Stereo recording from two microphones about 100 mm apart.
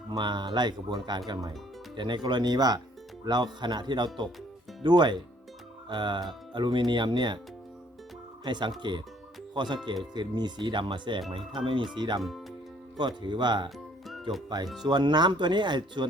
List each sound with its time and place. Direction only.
0.1 s speech: 45° right (ahead or behind)
8.4 s speech: 50° right (ahead or behind)
13.7 s music: centre (ahead or behind)
14.8 s speech: 45° right (ahead or behind)